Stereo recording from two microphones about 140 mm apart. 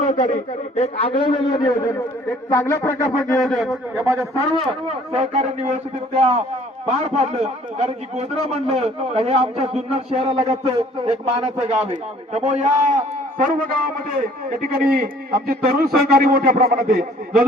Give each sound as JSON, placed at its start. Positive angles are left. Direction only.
{"t": 0.0, "sound": "a sound", "side_deg": 60}
{"t": 1.2, "sound": "a man's voice", "side_deg": 30}
{"t": 2.5, "sound": "a sound", "side_deg": 15}
{"t": 3.4, "sound": "a man's voice", "side_deg": 0}
{"t": 3.9, "sound": "speech", "side_deg": -20}
{"t": 4.7, "sound": "speech", "side_deg": -45}
{"t": 6.8, "sound": "a man's voice", "side_deg": -50}
{"t": 13.4, "sound": "a man's voice", "side_deg": -80}